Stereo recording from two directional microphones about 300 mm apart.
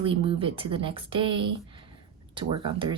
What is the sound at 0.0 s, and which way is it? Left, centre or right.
Speech, centre.